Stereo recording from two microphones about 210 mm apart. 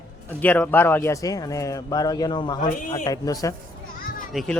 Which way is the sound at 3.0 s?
15° left (ahead or behind).